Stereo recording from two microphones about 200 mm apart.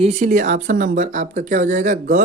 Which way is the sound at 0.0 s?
35° right (ahead or behind).